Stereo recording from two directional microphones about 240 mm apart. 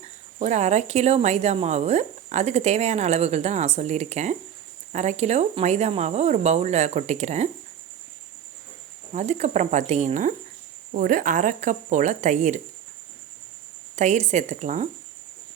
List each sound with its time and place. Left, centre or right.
0.0 s speech: right
9.1 s speech: right
13.9 s speech: right